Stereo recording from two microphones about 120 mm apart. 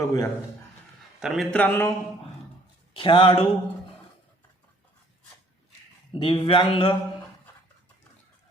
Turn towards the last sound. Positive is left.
turn(degrees=45)  # may be behind; listen again after turning